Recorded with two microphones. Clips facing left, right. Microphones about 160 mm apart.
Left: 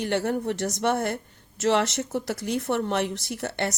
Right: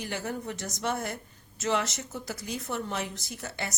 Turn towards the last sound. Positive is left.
turn(degrees=65)  # may be behind; listen again after turning